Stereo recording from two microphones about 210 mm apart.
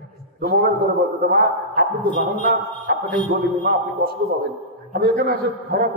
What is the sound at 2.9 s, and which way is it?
A man's voice, 50° right (ahead or behind).